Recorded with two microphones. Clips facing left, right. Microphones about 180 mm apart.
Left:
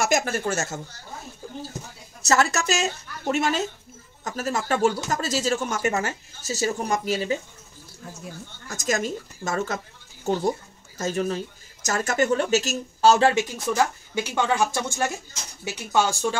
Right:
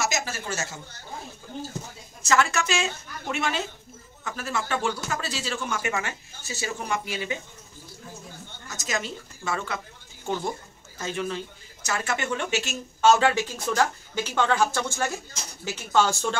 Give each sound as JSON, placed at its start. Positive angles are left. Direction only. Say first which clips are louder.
{"t": 0.0, "sound": "speech", "louder": "left 6 dB", "side_deg": 55}
{"t": 2.2, "sound": "speech", "louder": "left 2 dB", "side_deg": 40}
{"t": 8.6, "sound": "a woman's voice", "louder": "left 5 dB", "side_deg": 50}
{"t": 13.3, "sound": "speech", "louder": "left 3 dB", "side_deg": 20}